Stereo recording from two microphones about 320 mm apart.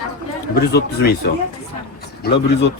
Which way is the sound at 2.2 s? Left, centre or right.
Left.